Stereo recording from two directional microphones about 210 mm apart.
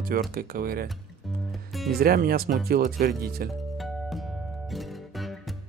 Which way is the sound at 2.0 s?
45° right (ahead or behind).